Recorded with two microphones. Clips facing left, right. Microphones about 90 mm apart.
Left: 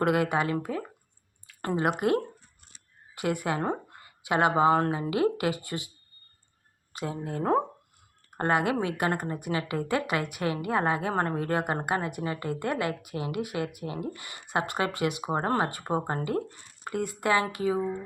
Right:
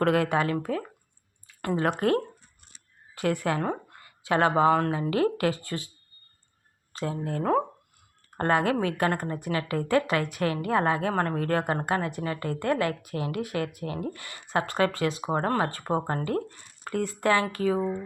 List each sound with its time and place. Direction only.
0.0 s a woman's voice: 10° left (ahead or behind)
4.7 s speech: 30° left (ahead or behind)
5.1 s a woman's voice: 15° left (ahead or behind)
6.9 s a woman's voice: 15° left (ahead or behind)
11.1 s a woman's voice: 25° left (ahead or behind)